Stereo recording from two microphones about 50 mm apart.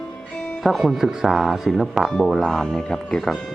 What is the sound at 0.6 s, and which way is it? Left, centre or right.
Speech, centre.